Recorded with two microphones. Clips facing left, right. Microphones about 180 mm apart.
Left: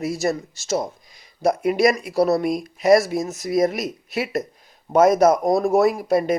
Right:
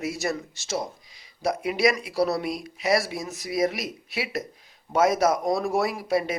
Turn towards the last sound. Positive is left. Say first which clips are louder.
# left 7 dB
turn(degrees=45)  # may be behind; listen again after turning